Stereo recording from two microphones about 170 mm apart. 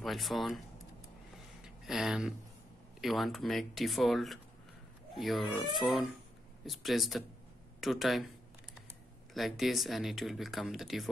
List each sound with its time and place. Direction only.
0.0 s speech: centre (ahead or behind)
1.6 s a sound: 5° right (ahead or behind)
3.0 s speech: centre (ahead or behind)
9.3 s speech: centre (ahead or behind)